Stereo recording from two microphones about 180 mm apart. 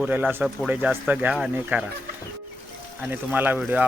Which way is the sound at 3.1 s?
10° right (ahead or behind).